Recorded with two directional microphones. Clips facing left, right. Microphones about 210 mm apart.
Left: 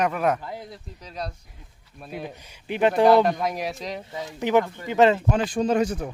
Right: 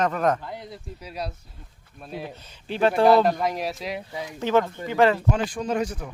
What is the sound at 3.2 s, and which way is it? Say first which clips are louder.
Speech: right 1 dB; centre (ahead or behind).